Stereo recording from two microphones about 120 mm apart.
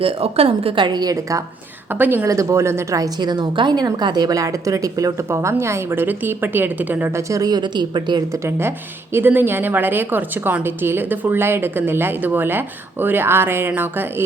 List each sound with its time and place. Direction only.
0.0 s speech: 50° right (ahead or behind); by 1.5 s 25° right (ahead or behind)
1.9 s a woman's voice: 15° right (ahead or behind); by 8.2 s 40° right (ahead or behind)
8.3 s a woman's voice: 20° right (ahead or behind)